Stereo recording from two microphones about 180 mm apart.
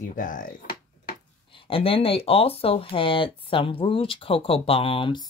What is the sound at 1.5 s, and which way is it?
Speech, 30° left (ahead or behind).